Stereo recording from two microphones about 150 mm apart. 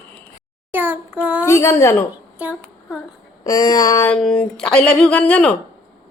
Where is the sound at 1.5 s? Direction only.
20° left (ahead or behind).